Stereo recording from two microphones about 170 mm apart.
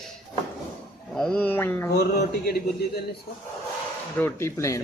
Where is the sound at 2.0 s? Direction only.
70° left (ahead or behind).